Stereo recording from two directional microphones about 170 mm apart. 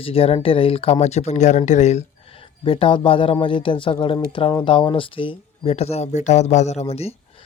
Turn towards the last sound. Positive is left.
turn(degrees=35)  # may be behind; listen again after turning